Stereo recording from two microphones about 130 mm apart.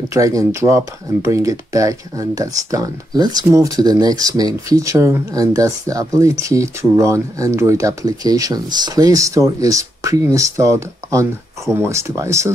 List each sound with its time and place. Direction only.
0.1 s speech: 25° right (ahead or behind)